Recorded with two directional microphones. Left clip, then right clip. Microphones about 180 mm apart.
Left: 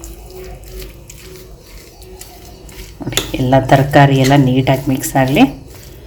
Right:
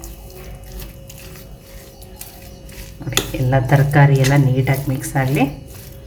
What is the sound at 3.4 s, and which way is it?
Speech, 30° left (ahead or behind).